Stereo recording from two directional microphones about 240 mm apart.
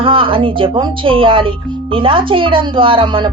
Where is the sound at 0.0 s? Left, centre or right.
Right.